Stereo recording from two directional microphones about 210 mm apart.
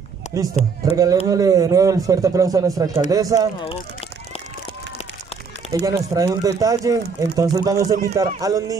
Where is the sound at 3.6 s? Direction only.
30° left (ahead or behind).